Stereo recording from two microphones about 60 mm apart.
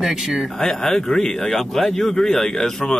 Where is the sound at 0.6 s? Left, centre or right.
Centre.